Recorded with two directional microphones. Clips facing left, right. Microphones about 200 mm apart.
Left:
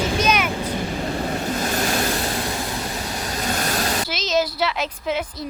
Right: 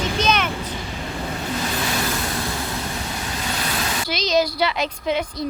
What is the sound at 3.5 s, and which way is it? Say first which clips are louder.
Vehicle: left 4 dB; 45° left (ahead or behind).